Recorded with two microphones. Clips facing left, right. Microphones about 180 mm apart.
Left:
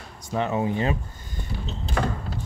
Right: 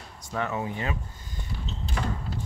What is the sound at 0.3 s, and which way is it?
Speech, 25° left (ahead or behind).